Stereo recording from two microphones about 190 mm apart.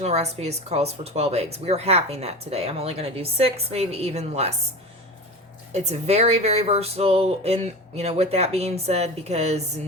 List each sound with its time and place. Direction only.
0.0 s speech: 35° right (ahead or behind)
5.7 s speech: 35° right (ahead or behind)